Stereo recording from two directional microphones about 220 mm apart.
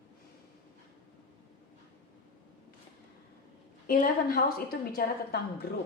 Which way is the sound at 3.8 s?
40° left (ahead or behind).